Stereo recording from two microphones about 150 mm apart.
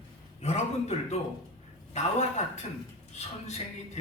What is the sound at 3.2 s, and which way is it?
Speech, 45° left (ahead or behind).